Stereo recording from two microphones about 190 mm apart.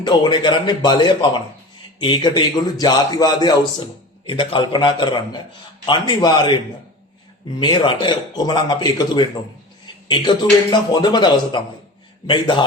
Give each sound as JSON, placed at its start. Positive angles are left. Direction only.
{"t": 0.0, "sound": "speech", "side_deg": 20}
{"t": 7.6, "sound": "speech", "side_deg": 25}